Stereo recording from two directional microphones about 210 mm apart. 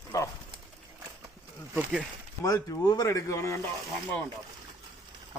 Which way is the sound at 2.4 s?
15° left (ahead or behind).